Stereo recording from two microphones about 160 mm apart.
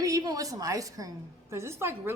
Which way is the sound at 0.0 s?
20° right (ahead or behind).